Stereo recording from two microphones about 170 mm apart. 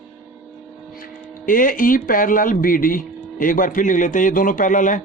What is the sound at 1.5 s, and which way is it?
Speech, 55° left (ahead or behind).